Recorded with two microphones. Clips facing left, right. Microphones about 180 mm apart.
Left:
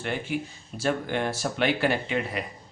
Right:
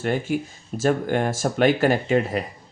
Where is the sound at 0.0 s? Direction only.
45° right (ahead or behind).